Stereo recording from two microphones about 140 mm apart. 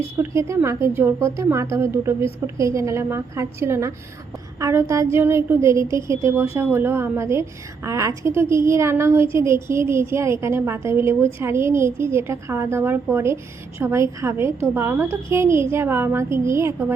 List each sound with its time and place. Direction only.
0.2 s a woman's voice: 20° right (ahead or behind)